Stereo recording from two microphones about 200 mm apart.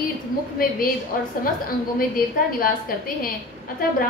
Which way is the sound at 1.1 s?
45° left (ahead or behind).